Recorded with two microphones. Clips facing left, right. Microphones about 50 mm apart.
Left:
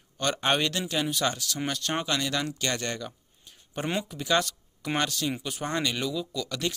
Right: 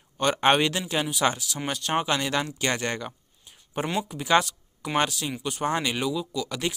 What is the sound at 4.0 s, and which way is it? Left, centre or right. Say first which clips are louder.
Speech: right 5 dB; centre.